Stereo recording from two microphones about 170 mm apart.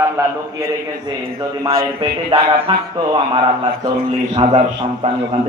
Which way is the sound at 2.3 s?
35° right (ahead or behind).